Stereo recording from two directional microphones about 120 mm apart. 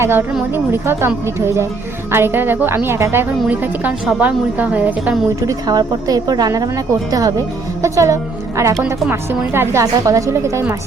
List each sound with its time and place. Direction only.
0.0 s a woman's voice: 15° right (ahead or behind)
5.4 s a woman's voice: 30° right (ahead or behind)